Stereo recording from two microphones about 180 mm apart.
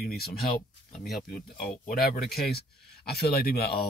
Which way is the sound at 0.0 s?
60° left (ahead or behind).